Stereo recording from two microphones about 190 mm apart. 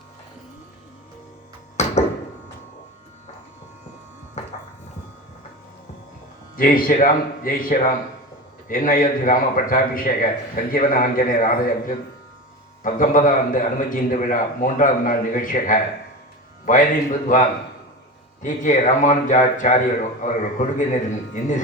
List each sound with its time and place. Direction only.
1.7 s a sound: 35° left (ahead or behind)
6.6 s a man's voice: 45° left (ahead or behind)
18.4 s a man's voice: 40° left (ahead or behind)